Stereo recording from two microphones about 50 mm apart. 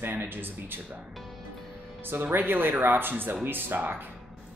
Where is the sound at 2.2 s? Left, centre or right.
Right.